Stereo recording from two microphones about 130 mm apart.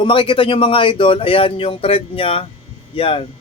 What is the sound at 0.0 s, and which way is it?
Speech, 40° left (ahead or behind).